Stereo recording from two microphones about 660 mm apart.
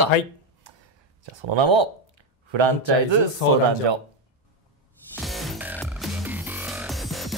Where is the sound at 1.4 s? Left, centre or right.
Right.